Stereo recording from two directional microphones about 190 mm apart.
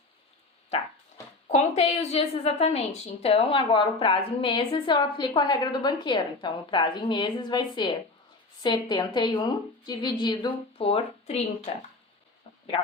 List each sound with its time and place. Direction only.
1.5 s a woman's voice: 35° left (ahead or behind)